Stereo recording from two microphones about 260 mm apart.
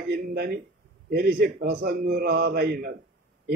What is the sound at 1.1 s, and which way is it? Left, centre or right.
A man's voice, right.